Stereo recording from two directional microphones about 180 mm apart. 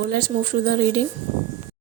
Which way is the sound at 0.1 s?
55° right (ahead or behind).